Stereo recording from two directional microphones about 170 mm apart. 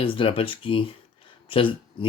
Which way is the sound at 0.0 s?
30° left (ahead or behind).